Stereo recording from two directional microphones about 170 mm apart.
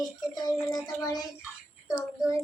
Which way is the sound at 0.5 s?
5° left (ahead or behind).